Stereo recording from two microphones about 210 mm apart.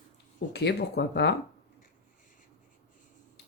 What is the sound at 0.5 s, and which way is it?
Speech, 55° left (ahead or behind).